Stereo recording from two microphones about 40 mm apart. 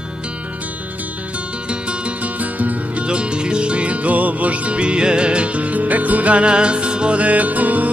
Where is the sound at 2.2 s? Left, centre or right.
Right.